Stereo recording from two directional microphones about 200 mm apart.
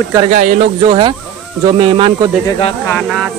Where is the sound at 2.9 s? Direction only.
Centre (ahead or behind).